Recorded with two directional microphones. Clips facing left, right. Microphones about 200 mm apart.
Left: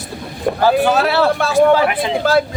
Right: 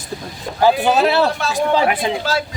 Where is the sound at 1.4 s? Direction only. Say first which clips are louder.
Left 5 dB; 55° left (ahead or behind).